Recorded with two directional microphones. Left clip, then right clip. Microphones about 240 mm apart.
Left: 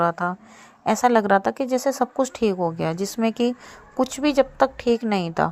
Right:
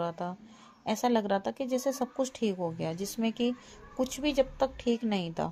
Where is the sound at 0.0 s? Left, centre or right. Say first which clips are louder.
Left 13 dB; centre.